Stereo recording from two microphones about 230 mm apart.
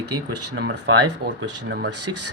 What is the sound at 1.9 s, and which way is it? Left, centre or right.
Speech, right.